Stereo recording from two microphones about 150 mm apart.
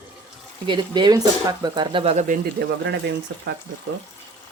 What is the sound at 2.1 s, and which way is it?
Speech, 75° right (ahead or behind).